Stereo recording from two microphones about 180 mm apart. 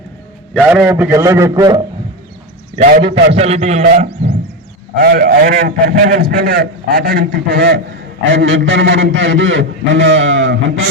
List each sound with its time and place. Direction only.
0.7 s a man's voice: 10° right (ahead or behind)
2.7 s a man's voice: 45° right (ahead or behind)
4.9 s a man's voice: 60° right (ahead or behind)
8.3 s a man's voice: 90° right